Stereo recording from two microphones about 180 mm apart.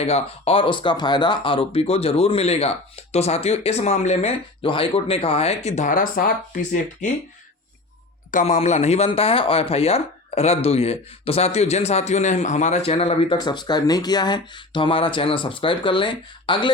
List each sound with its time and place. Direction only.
0.0 s speech: 35° left (ahead or behind)
8.3 s speech: 40° left (ahead or behind); by 16.7 s 25° left (ahead or behind)